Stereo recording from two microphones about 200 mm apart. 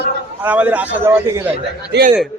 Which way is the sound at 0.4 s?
10° right (ahead or behind).